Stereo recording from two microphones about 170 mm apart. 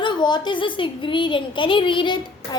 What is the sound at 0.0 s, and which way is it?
A woman's voice, 25° left (ahead or behind).